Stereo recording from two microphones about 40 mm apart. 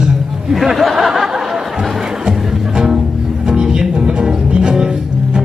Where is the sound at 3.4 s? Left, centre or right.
Centre.